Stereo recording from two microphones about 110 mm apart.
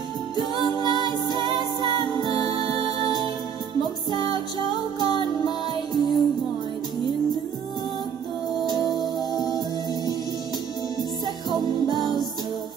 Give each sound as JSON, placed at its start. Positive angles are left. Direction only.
{"t": 0.4, "sound": "music", "side_deg": 40}
{"t": 3.8, "sound": "music", "side_deg": 40}
{"t": 8.6, "sound": "music", "side_deg": 40}